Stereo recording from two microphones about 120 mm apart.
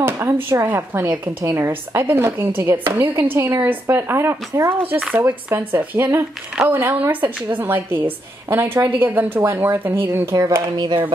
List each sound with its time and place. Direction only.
0.0 s a woman's voice: 20° right (ahead or behind)